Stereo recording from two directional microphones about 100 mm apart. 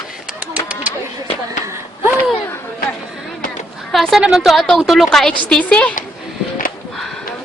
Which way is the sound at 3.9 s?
Centre (ahead or behind).